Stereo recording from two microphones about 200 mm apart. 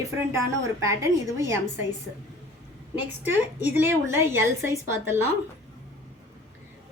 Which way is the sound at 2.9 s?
10° right (ahead or behind).